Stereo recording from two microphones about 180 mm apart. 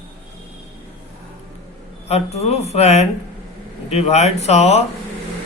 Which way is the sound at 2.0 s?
35° left (ahead or behind).